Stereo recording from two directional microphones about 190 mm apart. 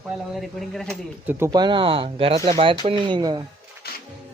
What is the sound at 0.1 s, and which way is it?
Speech, centre (ahead or behind).